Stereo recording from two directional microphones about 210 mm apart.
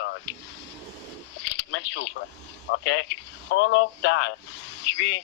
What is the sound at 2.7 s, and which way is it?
Speech, 60° left (ahead or behind).